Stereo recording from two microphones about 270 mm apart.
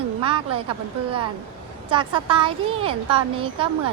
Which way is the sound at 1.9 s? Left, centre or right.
Centre.